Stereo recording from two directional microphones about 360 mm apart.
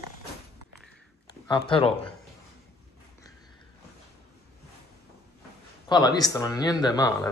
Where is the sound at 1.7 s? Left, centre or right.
Centre.